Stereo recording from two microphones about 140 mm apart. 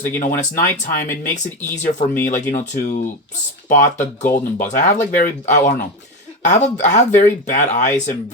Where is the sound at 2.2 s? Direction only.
60° left (ahead or behind).